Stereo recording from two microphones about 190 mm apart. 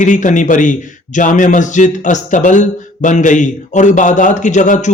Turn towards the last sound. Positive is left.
turn(degrees=40)  # may be behind; listen again after turning